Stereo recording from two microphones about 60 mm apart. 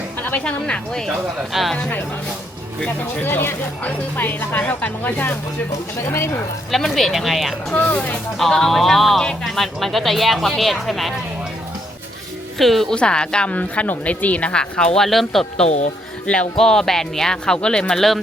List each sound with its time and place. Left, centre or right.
0.3 s speech: centre
1.5 s speech: centre
3.2 s speech: left
6.1 s speech: left
6.7 s speech: centre
12.5 s speech: centre
12.9 s speech: centre
13.5 s speech: left
15.0 s speech: centre
16.2 s speech: centre
16.6 s speech: centre